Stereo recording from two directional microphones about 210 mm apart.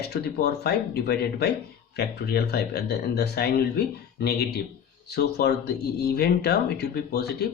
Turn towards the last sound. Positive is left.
turn(degrees=50)  # may be behind; listen again after turning